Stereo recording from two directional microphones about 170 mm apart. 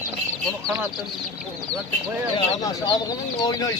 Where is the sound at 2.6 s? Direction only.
20° left (ahead or behind).